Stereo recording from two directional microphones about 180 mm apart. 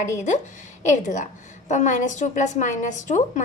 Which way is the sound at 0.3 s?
45° left (ahead or behind).